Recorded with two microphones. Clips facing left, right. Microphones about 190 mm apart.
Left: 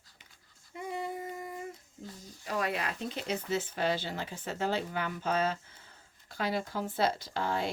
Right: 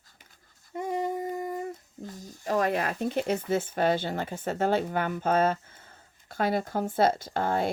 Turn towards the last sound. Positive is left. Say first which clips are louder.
# right 5 dB
turn(degrees=-50)  # may be behind; listen again after turning